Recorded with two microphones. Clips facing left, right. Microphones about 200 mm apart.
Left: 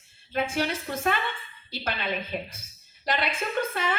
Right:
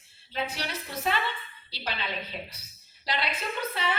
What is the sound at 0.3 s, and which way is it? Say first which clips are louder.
A woman's voice: left 6 dB; 50° left (ahead or behind).